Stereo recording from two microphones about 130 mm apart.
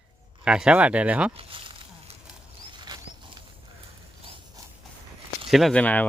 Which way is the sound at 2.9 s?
30° right (ahead or behind).